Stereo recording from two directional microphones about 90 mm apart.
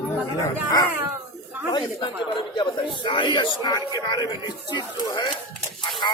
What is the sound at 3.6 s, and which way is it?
Speech, 45° left (ahead or behind).